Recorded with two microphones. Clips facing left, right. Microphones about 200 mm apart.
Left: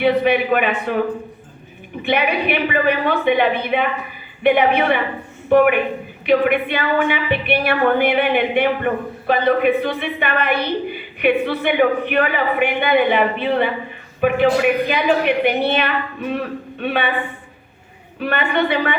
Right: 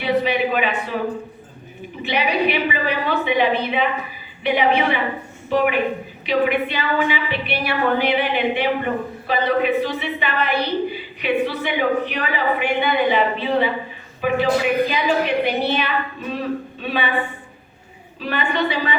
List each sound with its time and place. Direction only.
0.0 s a woman's voice: 55° left (ahead or behind)
2.0 s a woman's voice: 55° left (ahead or behind)
18.2 s a woman's voice: 60° left (ahead or behind)